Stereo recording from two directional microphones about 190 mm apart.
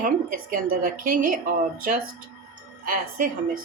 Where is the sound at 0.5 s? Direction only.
45° right (ahead or behind).